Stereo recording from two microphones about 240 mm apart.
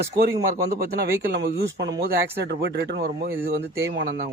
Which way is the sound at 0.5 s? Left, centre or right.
Right.